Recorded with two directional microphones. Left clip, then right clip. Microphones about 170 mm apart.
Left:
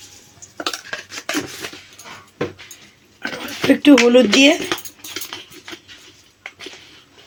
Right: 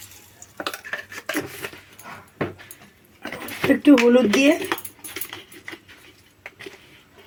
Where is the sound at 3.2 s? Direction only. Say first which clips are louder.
Left 4 dB; 35° left (ahead or behind).